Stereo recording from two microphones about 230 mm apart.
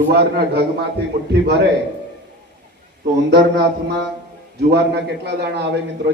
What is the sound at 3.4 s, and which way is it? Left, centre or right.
A man's voice, right.